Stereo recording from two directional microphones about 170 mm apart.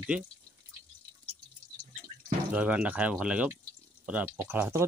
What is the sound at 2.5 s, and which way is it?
Speech, 10° right (ahead or behind).